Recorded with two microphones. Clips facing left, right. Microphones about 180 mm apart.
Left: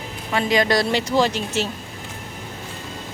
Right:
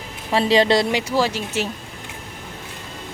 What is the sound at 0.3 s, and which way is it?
Speech, 30° right (ahead or behind).